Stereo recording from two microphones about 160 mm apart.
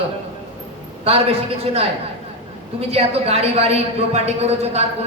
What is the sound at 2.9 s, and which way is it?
A man's voice, 40° right (ahead or behind).